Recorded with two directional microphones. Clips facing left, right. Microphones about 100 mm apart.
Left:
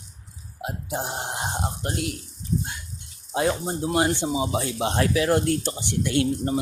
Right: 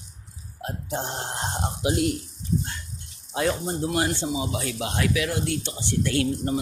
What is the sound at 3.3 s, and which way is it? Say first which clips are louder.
Speech: left 1 dB; 25° left (ahead or behind).